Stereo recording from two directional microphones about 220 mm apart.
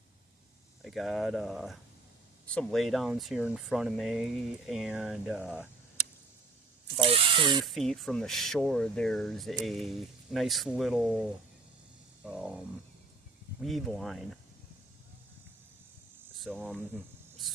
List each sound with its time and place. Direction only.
0.9 s speech: centre (ahead or behind)
7.0 s speech: 20° right (ahead or behind)
7.6 s speech: centre (ahead or behind)
12.2 s a sound: 5° right (ahead or behind)
13.6 s speech: centre (ahead or behind)
16.4 s speech: centre (ahead or behind)